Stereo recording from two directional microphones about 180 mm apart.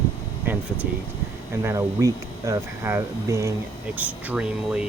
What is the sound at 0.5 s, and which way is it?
Air conditioning, 10° right (ahead or behind).